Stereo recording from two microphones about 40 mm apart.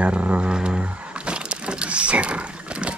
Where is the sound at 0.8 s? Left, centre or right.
Right.